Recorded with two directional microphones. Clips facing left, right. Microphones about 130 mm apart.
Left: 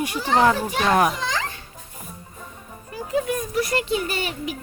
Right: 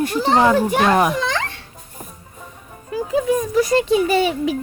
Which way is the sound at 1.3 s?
70° right (ahead or behind).